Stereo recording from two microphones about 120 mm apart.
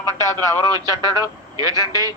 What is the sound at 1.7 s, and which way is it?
Speech, 30° left (ahead or behind).